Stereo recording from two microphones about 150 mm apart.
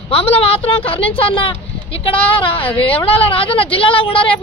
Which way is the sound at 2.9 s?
40° left (ahead or behind).